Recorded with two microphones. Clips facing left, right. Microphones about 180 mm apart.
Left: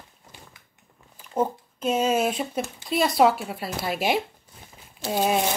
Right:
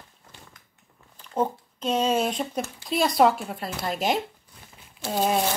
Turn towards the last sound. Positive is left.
turn(degrees=5)  # may be behind; listen again after turning